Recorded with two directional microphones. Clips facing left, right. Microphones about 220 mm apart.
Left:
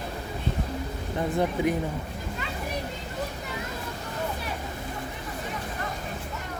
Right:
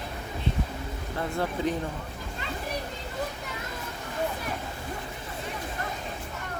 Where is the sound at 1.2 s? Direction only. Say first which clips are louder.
Left 4 dB; 15° left (ahead or behind).